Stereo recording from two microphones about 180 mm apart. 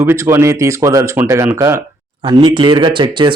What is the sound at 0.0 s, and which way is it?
Speech, 15° right (ahead or behind).